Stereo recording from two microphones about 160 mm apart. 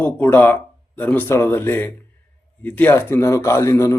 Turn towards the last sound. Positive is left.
turn(degrees=15)  # may be behind; listen again after turning